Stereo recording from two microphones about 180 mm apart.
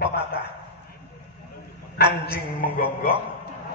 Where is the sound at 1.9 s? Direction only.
65° left (ahead or behind).